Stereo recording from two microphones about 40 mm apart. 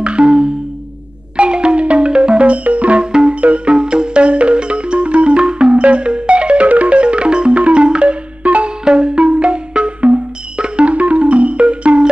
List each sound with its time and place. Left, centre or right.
0.0 s music: right
3.1 s music: right
3.3 s music: right